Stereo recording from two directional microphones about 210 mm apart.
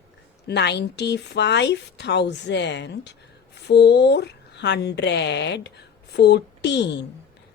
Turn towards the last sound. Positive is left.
turn(degrees=55)  # may be behind; listen again after turning